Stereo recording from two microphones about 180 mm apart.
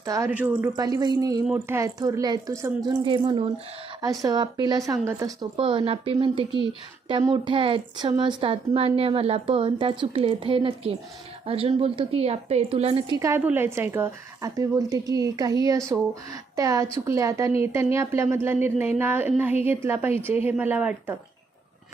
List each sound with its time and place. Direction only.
0.0 s speech: 20° right (ahead or behind)
0.3 s speech: 10° right (ahead or behind)
0.8 s a woman's voice: 20° right (ahead or behind)
3.0 s a woman's voice: 30° right (ahead or behind)
13.1 s a woman's voice: 15° right (ahead or behind)